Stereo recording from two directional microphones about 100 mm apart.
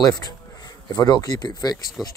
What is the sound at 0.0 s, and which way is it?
Speech, 40° left (ahead or behind).